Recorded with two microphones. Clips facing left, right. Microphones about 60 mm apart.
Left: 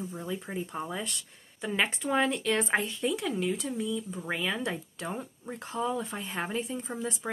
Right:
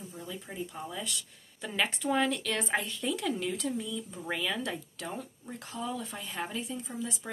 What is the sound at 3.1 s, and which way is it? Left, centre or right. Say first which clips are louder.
Speech: left 2 dB; centre.